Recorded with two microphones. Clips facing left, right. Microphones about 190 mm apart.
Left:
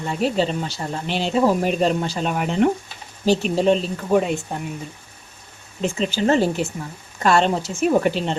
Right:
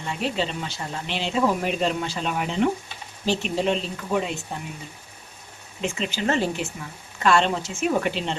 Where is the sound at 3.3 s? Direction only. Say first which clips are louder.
Left 6 dB; 40° left (ahead or behind).